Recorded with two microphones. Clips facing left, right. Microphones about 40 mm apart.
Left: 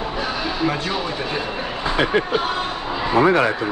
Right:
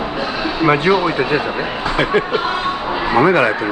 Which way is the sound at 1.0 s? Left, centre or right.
Right.